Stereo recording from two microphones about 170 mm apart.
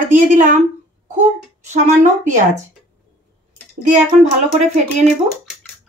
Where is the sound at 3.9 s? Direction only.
45° right (ahead or behind).